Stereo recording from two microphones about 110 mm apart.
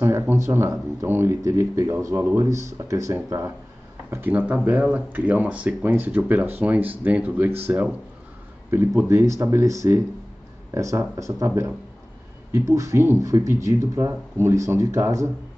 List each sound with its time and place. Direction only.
0.0 s speech: 20° right (ahead or behind)